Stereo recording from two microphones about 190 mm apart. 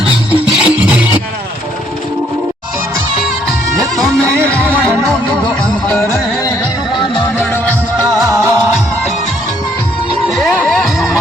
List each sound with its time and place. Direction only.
0.3 s music: 5° right (ahead or behind)
3.9 s music: 5° left (ahead or behind)
8.0 s music: 15° right (ahead or behind)
10.3 s music: 5° left (ahead or behind)